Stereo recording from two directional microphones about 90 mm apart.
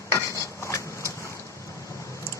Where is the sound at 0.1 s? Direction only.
35° left (ahead or behind).